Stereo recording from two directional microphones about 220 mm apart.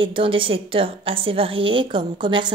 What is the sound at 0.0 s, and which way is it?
A woman's voice, 25° right (ahead or behind).